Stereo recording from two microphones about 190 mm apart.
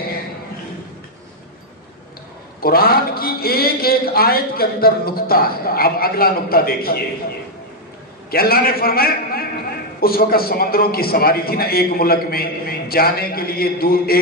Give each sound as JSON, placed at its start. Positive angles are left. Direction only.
{"t": 2.6, "sound": "a man's voice", "side_deg": 50}
{"t": 8.3, "sound": "a man's voice", "side_deg": 50}